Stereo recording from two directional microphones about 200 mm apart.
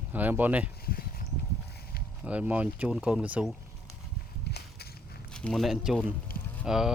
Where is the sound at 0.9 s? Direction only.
50° left (ahead or behind).